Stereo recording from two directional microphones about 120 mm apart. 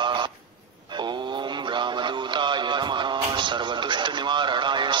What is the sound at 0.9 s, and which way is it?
Synthetic singing, 40° right (ahead or behind).